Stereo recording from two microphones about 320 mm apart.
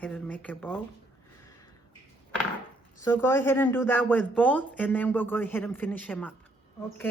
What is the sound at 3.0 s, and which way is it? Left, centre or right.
Speech, centre.